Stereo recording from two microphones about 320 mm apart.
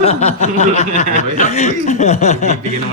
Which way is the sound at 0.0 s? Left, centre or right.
Centre.